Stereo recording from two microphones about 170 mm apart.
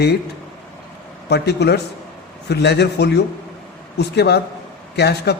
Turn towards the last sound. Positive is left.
turn(degrees=75)  # may be behind; listen again after turning